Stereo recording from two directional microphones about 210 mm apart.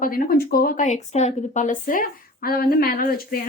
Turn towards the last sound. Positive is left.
turn(degrees=45)  # may be behind; listen again after turning